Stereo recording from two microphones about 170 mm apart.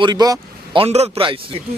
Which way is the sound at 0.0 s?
25° right (ahead or behind).